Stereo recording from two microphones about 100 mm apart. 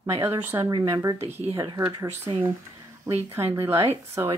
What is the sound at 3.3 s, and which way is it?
A woman's voice, 30° right (ahead or behind).